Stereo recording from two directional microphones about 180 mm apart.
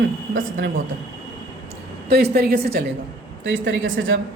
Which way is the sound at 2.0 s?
60° right (ahead or behind).